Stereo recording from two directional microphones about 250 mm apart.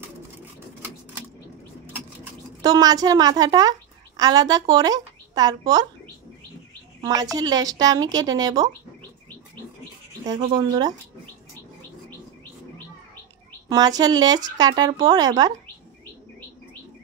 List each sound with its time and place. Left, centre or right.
2.6 s speech: centre
7.3 s speech: centre
10.2 s speech: centre
13.7 s speech: centre